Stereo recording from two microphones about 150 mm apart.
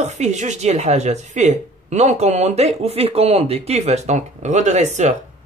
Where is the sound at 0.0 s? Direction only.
50° right (ahead or behind).